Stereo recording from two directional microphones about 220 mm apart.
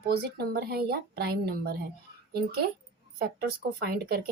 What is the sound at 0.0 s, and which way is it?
A woman's voice, 45° right (ahead or behind).